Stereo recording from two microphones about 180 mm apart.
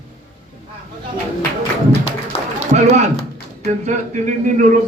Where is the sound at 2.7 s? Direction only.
40° right (ahead or behind).